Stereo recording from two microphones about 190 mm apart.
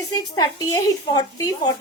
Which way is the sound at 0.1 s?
20° left (ahead or behind).